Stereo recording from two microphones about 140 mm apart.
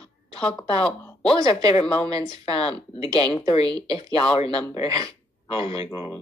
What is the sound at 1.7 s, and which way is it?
Speech, 40° left (ahead or behind).